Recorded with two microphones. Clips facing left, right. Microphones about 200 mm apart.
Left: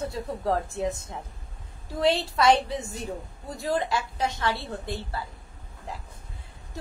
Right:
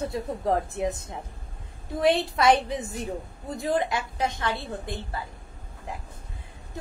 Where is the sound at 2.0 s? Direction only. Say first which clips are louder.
Right 1 dB; 20° right (ahead or behind).